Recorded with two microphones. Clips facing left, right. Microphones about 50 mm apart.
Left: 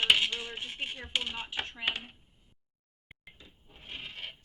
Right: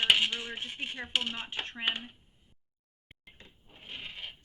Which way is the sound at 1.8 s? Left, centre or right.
Right.